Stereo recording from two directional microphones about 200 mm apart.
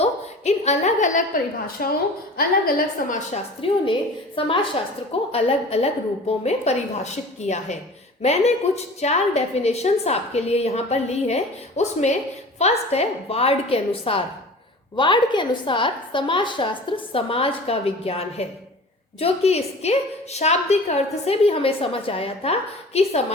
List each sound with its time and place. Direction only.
0.0 s a sound: 35° left (ahead or behind)
1.8 s a woman's voice: 45° left (ahead or behind)
3.6 s a woman's voice: 30° left (ahead or behind)